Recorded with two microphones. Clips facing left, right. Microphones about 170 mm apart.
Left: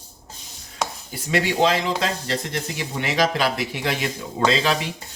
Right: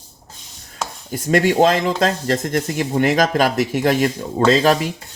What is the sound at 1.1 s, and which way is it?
Speech, 50° right (ahead or behind).